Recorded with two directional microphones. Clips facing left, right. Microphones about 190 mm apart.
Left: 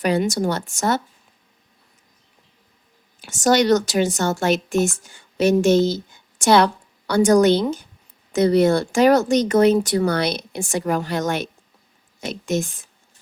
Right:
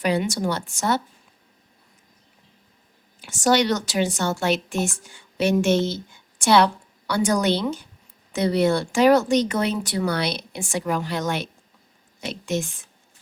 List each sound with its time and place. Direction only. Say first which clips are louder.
0.0 s a woman's voice: left 3 dB; 45° left (ahead or behind)
3.2 s a woman's voice: left 2 dB; 45° left (ahead or behind)